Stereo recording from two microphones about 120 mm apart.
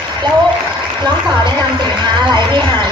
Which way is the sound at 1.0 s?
40° right (ahead or behind).